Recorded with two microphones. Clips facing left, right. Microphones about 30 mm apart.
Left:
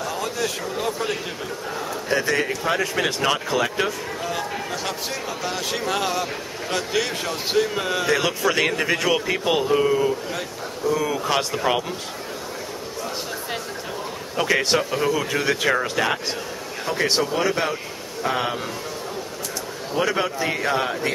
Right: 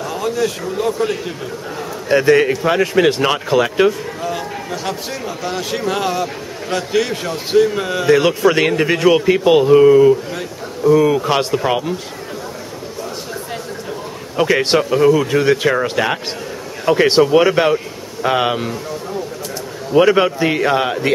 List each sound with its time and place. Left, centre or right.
0.0 s a man's voice: centre
2.0 s a man's voice: right
4.2 s a sound: centre
5.4 s a man's voice: centre
14.3 s a man's voice: centre
16.8 s speech: right
20.0 s a man's voice: right